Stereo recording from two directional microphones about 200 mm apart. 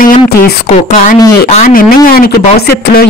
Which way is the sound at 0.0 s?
45° left (ahead or behind).